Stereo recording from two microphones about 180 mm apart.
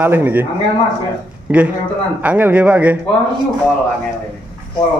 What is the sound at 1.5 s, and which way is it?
A man's voice, 10° right (ahead or behind).